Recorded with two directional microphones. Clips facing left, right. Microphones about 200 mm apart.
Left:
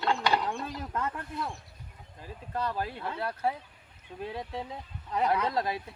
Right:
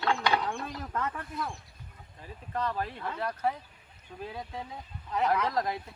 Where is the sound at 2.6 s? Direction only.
10° left (ahead or behind).